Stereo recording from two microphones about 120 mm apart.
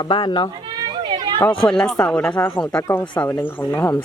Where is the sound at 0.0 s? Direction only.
40° left (ahead or behind).